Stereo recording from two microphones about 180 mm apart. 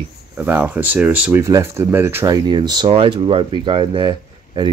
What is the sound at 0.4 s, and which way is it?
Speech, 10° right (ahead or behind).